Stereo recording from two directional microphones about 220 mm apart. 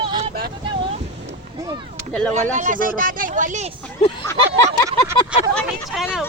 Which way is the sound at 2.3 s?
35° right (ahead or behind).